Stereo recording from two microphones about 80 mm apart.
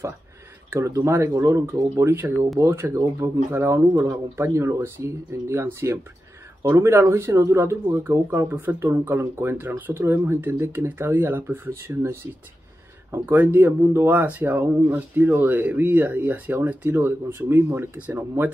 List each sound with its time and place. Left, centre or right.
0.7 s speech: right